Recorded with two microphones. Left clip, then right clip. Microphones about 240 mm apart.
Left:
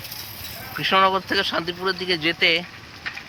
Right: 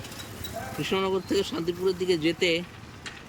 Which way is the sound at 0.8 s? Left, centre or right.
Centre.